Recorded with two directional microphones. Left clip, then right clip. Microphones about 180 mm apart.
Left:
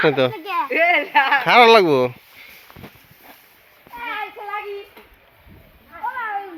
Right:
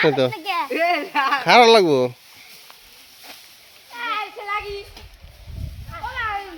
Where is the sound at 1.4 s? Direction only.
15° right (ahead or behind).